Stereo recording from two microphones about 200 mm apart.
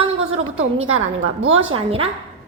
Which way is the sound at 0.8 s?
85° right.